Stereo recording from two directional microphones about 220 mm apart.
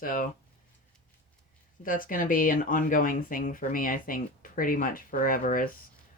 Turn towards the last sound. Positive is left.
turn(degrees=40)  # may be behind; listen again after turning